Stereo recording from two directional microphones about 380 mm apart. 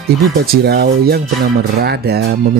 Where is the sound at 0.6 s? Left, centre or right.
Right.